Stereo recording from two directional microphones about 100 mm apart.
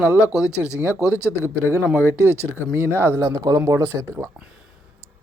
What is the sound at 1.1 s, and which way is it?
Speech, 25° left (ahead or behind).